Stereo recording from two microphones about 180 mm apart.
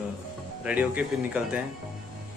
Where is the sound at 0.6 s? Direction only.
10° right (ahead or behind).